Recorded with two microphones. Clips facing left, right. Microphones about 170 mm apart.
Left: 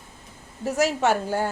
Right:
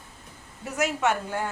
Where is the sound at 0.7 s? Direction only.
35° left (ahead or behind).